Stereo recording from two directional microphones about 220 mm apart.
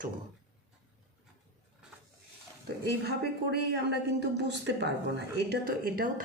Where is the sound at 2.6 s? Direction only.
50° right (ahead or behind).